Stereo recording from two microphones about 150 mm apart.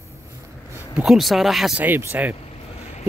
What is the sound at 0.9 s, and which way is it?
Speech, centre (ahead or behind).